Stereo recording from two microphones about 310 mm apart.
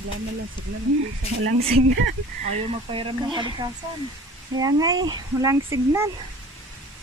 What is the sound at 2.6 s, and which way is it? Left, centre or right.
Speech, centre.